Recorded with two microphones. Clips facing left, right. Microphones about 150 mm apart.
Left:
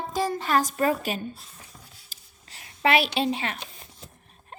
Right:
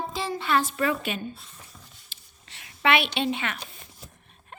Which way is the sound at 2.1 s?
40° left (ahead or behind).